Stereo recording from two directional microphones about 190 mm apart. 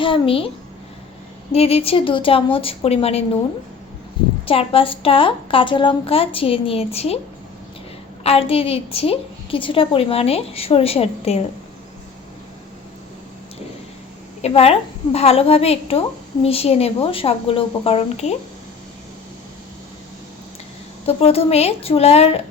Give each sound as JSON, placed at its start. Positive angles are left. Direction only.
{"t": 0.0, "sound": "a child's voice", "side_deg": 30}
{"t": 1.5, "sound": "a woman's voice", "side_deg": 30}
{"t": 4.4, "sound": "a woman's voice", "side_deg": 30}
{"t": 8.2, "sound": "a woman's voice", "side_deg": 30}
{"t": 14.4, "sound": "a woman's voice", "side_deg": 30}
{"t": 21.1, "sound": "a woman's voice", "side_deg": 30}